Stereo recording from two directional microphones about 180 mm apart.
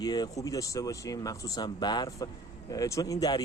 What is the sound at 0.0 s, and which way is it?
Speech, 20° left (ahead or behind).